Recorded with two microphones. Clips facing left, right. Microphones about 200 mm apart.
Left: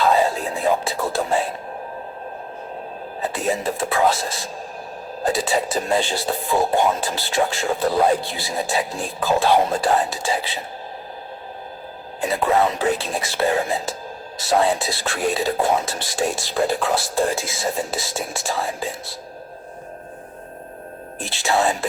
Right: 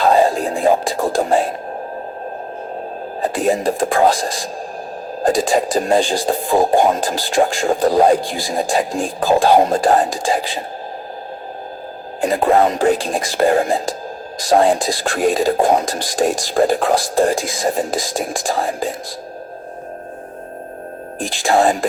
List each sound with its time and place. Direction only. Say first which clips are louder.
0.0 s music: right 5 dB; 45° right (ahead or behind)
3.2 s speech: right 6 dB; 45° right (ahead or behind)
12.2 s speech: right 5 dB; 45° right (ahead or behind)
17.6 s speech: right 5 dB; 40° right (ahead or behind)
17.9 s speech: right 6 dB; 90° right
18.3 s speech: right 5 dB; 50° right (ahead or behind)
21.4 s speech: right 5 dB; 50° right (ahead or behind)